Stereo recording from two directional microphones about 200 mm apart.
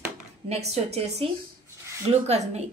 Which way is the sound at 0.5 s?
30° right (ahead or behind).